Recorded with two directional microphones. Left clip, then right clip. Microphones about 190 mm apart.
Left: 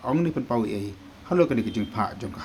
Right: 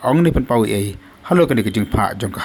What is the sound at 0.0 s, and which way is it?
Speech, 40° right (ahead or behind).